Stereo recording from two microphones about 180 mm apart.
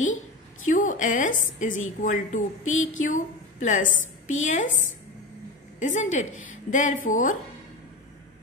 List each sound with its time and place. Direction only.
0.7 s a woman's voice: 45° left (ahead or behind)
5.8 s a woman's voice: 45° left (ahead or behind)